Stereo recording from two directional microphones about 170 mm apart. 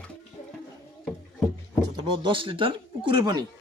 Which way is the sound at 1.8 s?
30° right (ahead or behind).